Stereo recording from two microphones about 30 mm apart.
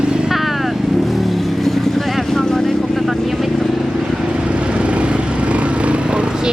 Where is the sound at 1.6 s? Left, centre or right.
Centre.